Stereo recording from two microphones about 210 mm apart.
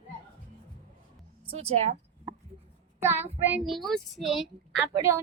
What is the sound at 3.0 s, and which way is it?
Child singing, 10° right (ahead or behind).